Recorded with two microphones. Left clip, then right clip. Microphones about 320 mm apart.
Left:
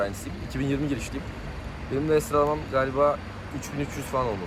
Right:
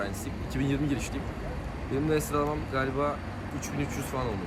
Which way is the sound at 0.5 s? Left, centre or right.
Centre.